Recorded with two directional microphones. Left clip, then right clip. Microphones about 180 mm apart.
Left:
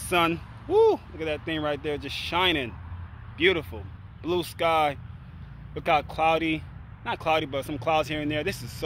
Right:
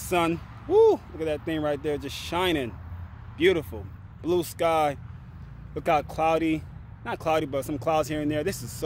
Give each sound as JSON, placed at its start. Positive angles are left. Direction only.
{"t": 0.0, "sound": "speech", "side_deg": -15}